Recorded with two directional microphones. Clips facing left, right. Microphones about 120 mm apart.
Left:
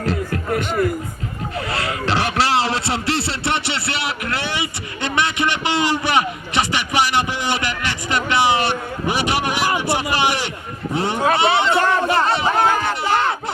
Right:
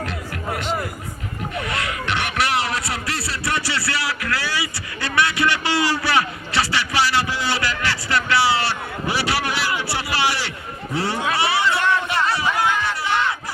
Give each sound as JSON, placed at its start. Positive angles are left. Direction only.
{"t": 0.0, "sound": "music", "side_deg": 35}
{"t": 0.5, "sound": "speech", "side_deg": 50}
{"t": 1.5, "sound": "a sound", "side_deg": 35}
{"t": 11.3, "sound": "chatter", "side_deg": 20}
{"t": 11.8, "sound": "music", "side_deg": 40}
{"t": 12.6, "sound": "a sound", "side_deg": 45}